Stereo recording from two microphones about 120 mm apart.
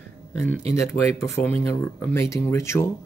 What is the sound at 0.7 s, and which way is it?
Speech, 20° left (ahead or behind).